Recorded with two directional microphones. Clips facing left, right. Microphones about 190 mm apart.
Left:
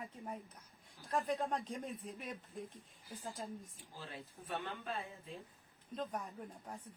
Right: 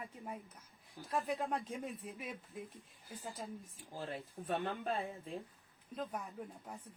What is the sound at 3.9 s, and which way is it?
Speech, 50° right (ahead or behind).